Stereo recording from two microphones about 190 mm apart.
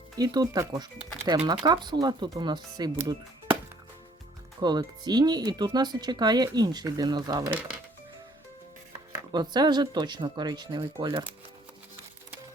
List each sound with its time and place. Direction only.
0.2 s speech: 20° right (ahead or behind)
4.6 s speech: 20° right (ahead or behind)
9.3 s speech: 20° right (ahead or behind)